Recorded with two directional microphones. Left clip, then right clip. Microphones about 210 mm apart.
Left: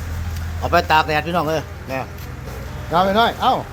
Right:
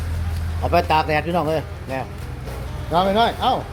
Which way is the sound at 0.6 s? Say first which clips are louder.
Left 2 dB; 5° left (ahead or behind).